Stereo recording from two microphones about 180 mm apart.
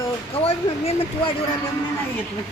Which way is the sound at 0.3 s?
30° left (ahead or behind).